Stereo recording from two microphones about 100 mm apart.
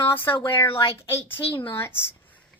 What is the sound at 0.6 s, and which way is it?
Speech, 60° left (ahead or behind).